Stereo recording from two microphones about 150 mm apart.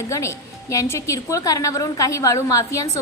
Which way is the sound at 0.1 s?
20° left (ahead or behind).